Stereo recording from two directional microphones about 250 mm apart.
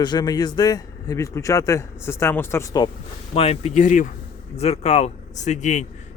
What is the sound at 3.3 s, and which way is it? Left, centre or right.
Speech, left.